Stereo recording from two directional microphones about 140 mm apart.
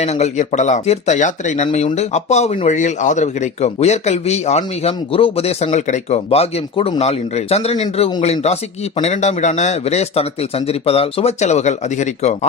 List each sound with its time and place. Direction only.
0.0 s speech: 55° left (ahead or behind)